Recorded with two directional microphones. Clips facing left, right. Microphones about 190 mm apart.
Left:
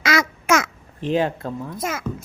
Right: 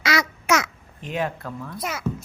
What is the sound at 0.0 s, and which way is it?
Babbling, 50° left (ahead or behind).